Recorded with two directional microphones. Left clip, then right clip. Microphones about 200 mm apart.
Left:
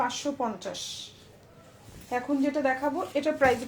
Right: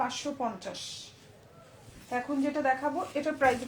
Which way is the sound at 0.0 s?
40° left (ahead or behind).